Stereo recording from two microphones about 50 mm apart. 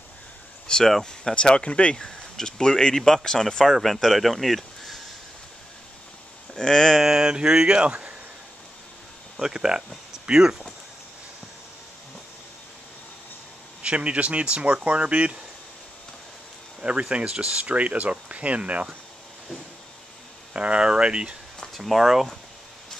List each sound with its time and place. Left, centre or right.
0.7 s speech: centre
3.7 s speech: centre
6.5 s speech: centre
7.0 s speech: centre
9.4 s speech: centre
13.8 s speech: right
17.1 s speech: centre
17.7 s speech: right
20.5 s speech: right
21.7 s speech: centre